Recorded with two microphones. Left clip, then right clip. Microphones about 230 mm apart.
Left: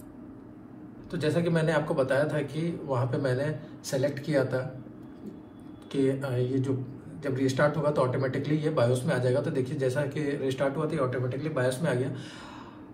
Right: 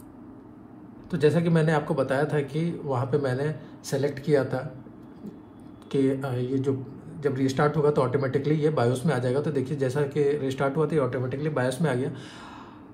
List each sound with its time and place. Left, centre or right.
1.1 s speech: right
5.9 s speech: right